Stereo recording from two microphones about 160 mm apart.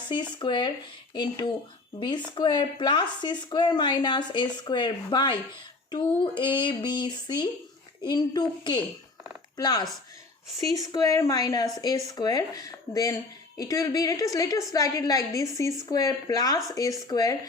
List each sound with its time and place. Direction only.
0.1 s speech: 30° left (ahead or behind)